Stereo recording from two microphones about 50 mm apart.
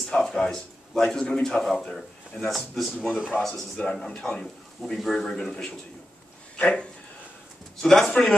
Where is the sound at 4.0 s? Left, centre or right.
Centre.